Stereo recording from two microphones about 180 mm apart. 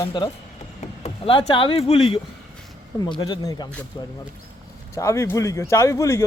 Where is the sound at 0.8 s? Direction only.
30° left (ahead or behind).